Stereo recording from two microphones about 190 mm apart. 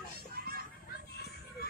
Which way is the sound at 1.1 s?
55° left (ahead or behind).